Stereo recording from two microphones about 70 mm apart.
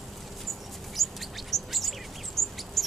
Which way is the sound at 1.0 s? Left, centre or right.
Centre.